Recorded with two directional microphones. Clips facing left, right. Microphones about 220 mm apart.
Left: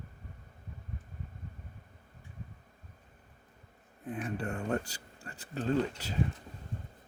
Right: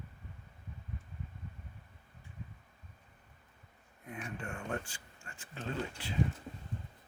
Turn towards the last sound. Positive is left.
turn(degrees=40)  # may be behind; listen again after turning